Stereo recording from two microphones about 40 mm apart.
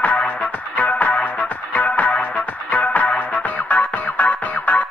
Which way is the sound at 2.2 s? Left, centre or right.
Left.